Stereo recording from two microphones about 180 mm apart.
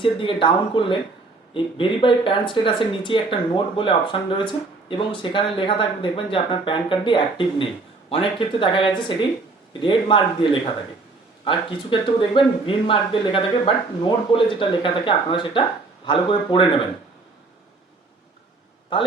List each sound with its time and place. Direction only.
0.0 s speech: 30° left (ahead or behind)